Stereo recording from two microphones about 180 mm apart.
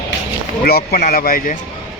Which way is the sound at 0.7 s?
55° left (ahead or behind).